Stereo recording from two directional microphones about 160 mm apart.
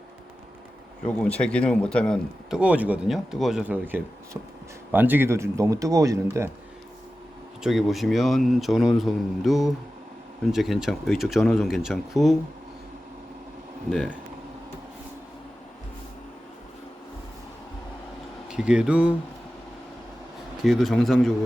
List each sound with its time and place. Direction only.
1.0 s speech: 10° left (ahead or behind)
2.5 s speech: 10° right (ahead or behind)
7.6 s a man's voice: centre (ahead or behind)
18.4 s speech: 5° right (ahead or behind)
20.7 s a man's voice: centre (ahead or behind)